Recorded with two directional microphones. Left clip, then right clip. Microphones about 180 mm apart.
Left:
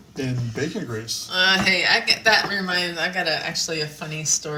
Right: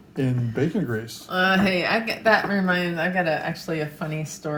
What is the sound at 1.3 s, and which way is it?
Speech, 50° right (ahead or behind).